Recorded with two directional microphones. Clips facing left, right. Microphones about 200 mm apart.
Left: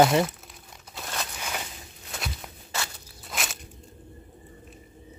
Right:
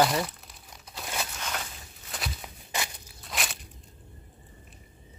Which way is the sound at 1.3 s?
10° left (ahead or behind).